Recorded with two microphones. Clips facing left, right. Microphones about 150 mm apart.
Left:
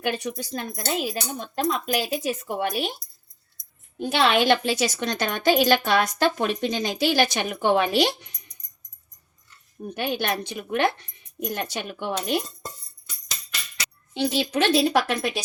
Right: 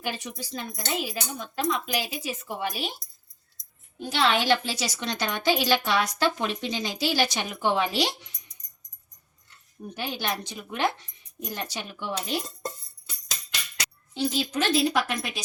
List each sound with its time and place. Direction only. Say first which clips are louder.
0.0 s speech: left 6 dB; 55° left (ahead or behind)
3.9 s a woman's voice: left 4 dB; 60° left (ahead or behind)
9.9 s a woman's voice: left 5 dB; 60° left (ahead or behind)
14.1 s speech: left 3 dB; 70° left (ahead or behind)